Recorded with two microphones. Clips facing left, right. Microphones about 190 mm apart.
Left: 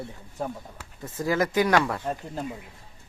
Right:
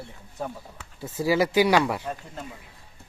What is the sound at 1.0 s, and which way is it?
Speech, 10° right (ahead or behind).